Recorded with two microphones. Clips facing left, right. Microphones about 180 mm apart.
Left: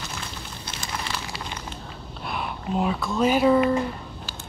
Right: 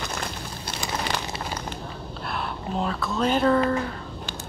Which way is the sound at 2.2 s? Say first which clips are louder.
Left 1 dB; 5° left (ahead or behind).